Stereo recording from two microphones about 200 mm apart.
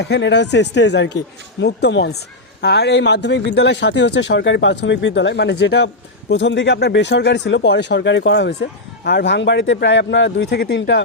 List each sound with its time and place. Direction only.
0.0 s a woman's voice: 60° left (ahead or behind)